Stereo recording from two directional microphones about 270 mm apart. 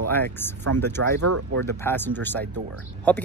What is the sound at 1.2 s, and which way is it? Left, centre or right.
Speech, right.